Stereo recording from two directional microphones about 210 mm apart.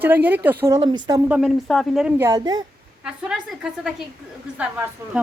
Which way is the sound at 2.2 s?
15° right (ahead or behind).